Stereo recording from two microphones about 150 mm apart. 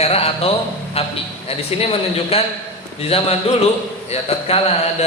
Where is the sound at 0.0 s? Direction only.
40° left (ahead or behind).